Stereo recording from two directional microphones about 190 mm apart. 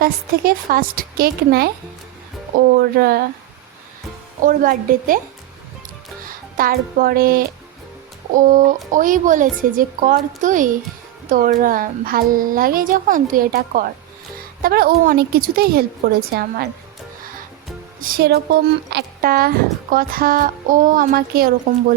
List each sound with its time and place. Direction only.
0.0 s speech: 50° right (ahead or behind)
4.4 s speech: 45° right (ahead or behind)
6.2 s speech: 50° right (ahead or behind)
18.0 s speech: 55° right (ahead or behind)